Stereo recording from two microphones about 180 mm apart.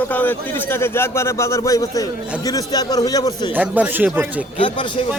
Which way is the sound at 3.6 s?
10° right (ahead or behind).